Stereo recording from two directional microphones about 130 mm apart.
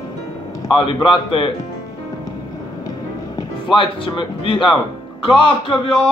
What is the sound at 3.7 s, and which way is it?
Speech, 40° left (ahead or behind).